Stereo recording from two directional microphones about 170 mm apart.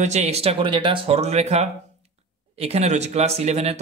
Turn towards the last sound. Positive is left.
turn(degrees=-40)  # may be behind; listen again after turning